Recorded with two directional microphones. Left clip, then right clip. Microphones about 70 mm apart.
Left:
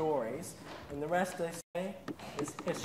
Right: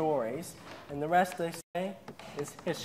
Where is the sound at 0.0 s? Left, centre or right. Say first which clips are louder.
Right 3 dB; right.